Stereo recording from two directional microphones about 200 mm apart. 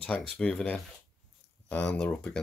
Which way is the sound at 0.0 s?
5° left (ahead or behind).